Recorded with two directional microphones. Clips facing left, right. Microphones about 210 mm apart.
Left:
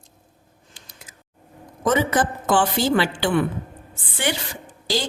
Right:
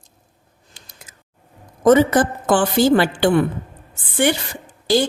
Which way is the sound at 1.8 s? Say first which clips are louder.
Right 7 dB; 45° right (ahead or behind).